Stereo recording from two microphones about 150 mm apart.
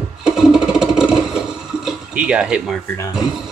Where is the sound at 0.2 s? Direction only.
5° right (ahead or behind).